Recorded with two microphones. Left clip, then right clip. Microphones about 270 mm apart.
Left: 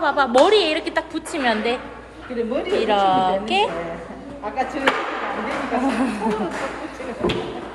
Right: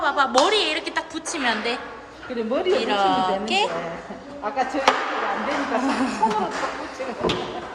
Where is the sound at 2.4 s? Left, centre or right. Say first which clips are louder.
Left 2 dB; right.